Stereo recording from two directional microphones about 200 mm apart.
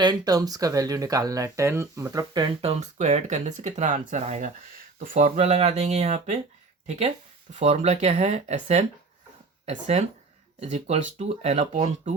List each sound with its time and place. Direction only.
0.0 s speech: 20° right (ahead or behind); by 12.1 s 35° right (ahead or behind)